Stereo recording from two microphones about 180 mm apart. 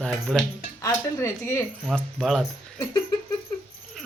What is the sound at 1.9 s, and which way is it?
Speech, centre (ahead or behind).